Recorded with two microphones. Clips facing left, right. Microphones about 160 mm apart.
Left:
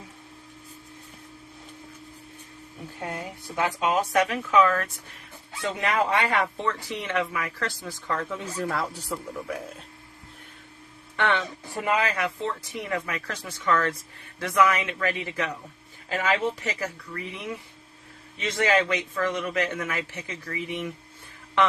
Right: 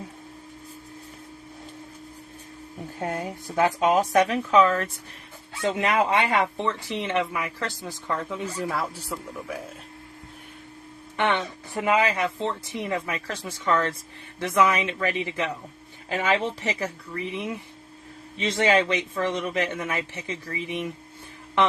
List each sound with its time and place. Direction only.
3.0 s speech: 40° right (ahead or behind); by 8.4 s 20° right (ahead or behind)
8.5 s speech: 5° right (ahead or behind)
11.2 s speech: 20° right (ahead or behind)